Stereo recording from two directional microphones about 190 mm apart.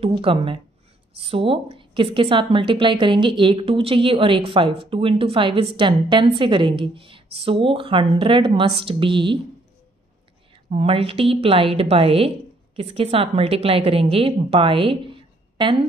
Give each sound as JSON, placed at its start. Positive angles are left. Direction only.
{"t": 0.0, "sound": "a woman's voice", "side_deg": -30}
{"t": 10.7, "sound": "a woman's voice", "side_deg": -30}